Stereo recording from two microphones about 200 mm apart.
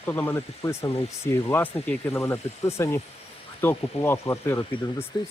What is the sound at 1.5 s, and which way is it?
Speech, 10° left (ahead or behind).